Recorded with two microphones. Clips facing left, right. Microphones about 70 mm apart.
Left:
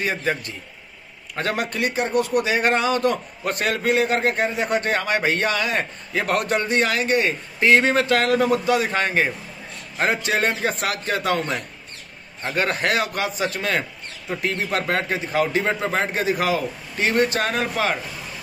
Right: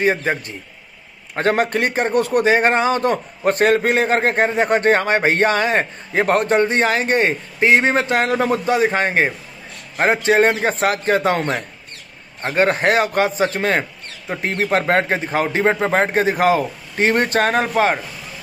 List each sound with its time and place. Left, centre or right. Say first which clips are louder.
0.0 s a man's voice: right 5 dB; right
12.4 s a man's voice: right 6 dB; right